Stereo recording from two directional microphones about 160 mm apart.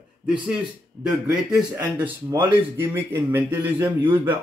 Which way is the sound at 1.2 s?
15° right (ahead or behind).